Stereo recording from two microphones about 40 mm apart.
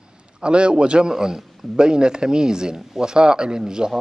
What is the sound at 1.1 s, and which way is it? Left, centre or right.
A man's voice, centre.